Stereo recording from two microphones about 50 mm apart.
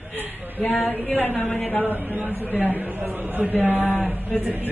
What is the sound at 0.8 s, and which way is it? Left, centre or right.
A woman's voice, left.